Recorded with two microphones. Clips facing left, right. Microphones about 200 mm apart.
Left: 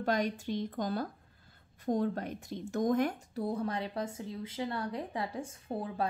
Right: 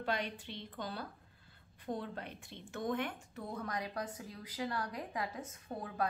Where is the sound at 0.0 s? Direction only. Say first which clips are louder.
Left 7 dB; 45° left (ahead or behind).